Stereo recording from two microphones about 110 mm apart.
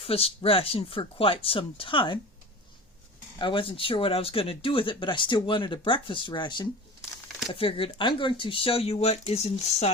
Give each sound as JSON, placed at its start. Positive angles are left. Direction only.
{"t": 0.0, "sound": "speech", "side_deg": 60}
{"t": 3.3, "sound": "speech", "side_deg": 50}
{"t": 7.5, "sound": "speech", "side_deg": 55}